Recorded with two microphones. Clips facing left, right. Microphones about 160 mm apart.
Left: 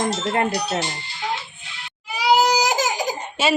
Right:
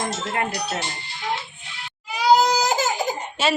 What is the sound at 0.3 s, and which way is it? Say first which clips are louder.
Speech: left 3 dB; 30° left (ahead or behind).